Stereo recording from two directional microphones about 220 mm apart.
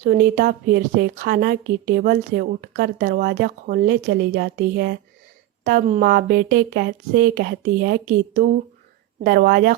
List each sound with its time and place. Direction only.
0.0 s a woman's voice: 40° right (ahead or behind)